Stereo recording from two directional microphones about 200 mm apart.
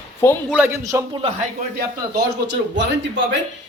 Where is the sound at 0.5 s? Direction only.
10° right (ahead or behind).